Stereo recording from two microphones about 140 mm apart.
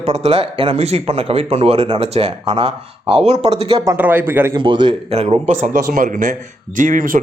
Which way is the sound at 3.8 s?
15° right (ahead or behind).